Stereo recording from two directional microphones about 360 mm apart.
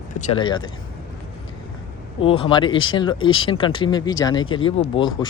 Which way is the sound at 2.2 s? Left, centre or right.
Centre.